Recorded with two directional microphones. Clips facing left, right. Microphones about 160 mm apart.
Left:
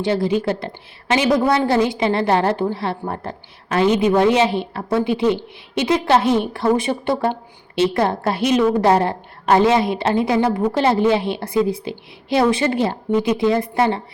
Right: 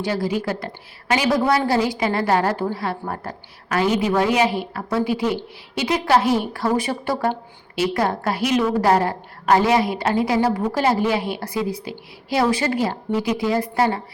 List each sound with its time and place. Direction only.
0.0 s a woman's voice: 25° left (ahead or behind)